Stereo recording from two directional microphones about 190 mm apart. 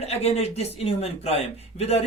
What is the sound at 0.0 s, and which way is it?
Speech, 35° left (ahead or behind).